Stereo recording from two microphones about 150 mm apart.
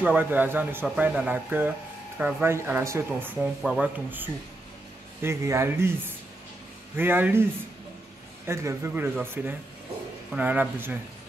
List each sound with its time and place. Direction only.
0.0 s speech: 10° right (ahead or behind)
3.3 s speech: 5° right (ahead or behind)
8.5 s speech: 20° right (ahead or behind)